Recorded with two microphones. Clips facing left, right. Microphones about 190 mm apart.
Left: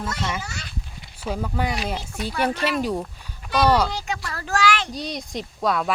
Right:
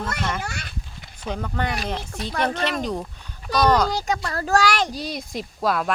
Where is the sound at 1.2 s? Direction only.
5° left (ahead or behind).